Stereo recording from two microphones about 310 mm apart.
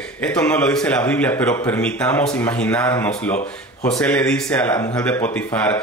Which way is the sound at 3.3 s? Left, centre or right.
Left.